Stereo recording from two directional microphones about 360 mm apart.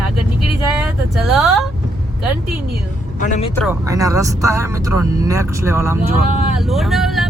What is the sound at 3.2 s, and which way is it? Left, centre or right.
Speech, centre.